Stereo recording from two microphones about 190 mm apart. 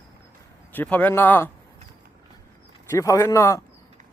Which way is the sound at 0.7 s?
10° left (ahead or behind).